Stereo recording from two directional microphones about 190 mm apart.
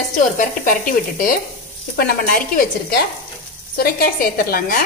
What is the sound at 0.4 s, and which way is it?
A woman's voice, 45° left (ahead or behind).